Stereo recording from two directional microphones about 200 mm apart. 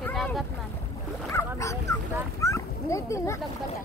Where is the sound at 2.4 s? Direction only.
15° left (ahead or behind).